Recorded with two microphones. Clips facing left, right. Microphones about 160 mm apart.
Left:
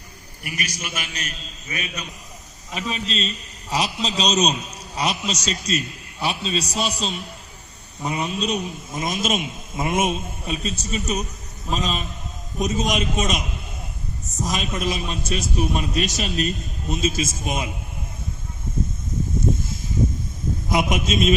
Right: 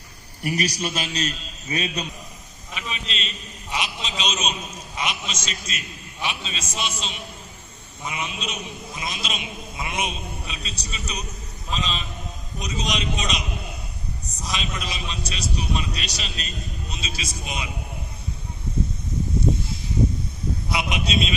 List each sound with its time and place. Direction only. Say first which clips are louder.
0.4 s a man's voice: right 7 dB; 35° right (ahead or behind)
2.7 s a man's voice: left 6 dB; 40° left (ahead or behind)
20.7 s a man's voice: left 6 dB; 45° left (ahead or behind)